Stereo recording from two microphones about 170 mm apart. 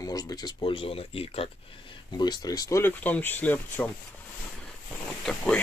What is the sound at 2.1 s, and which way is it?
Speech, 25° left (ahead or behind).